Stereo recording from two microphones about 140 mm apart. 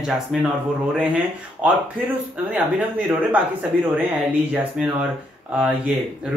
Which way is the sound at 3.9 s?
10° right (ahead or behind).